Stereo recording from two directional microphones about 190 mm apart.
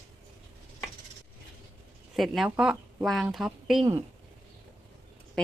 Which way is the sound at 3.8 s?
20° right (ahead or behind).